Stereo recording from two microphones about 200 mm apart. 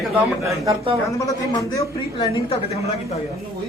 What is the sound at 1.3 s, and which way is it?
A man's voice, 15° left (ahead or behind).